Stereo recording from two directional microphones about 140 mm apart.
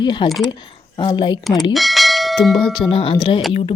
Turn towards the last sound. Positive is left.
turn(degrees=35)  # may be behind; listen again after turning